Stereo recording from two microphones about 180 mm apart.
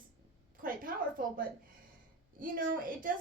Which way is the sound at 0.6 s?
50° right (ahead or behind).